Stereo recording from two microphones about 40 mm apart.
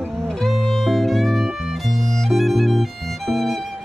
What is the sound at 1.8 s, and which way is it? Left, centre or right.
Violin, centre.